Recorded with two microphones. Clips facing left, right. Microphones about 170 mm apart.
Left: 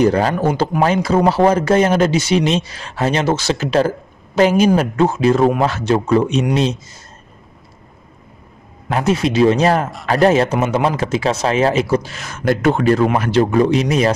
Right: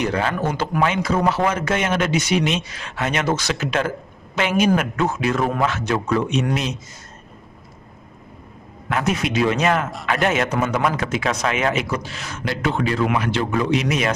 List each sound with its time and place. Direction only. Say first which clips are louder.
0.0 s a man's voice: left 7 dB; 35° left (ahead or behind)
8.8 s a man's voice: left 5 dB; 30° left (ahead or behind)
12.1 s a man's voice: left 9 dB; 45° left (ahead or behind)